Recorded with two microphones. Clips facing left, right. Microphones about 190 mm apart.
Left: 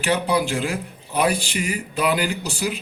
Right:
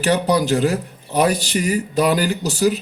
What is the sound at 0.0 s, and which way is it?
Speech, 40° right (ahead or behind).